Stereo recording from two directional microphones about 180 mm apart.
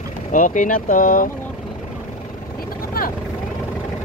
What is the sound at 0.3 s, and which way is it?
Speech, 45° left (ahead or behind).